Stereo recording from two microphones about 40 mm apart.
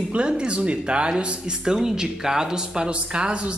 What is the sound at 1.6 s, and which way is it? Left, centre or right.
Speech, centre.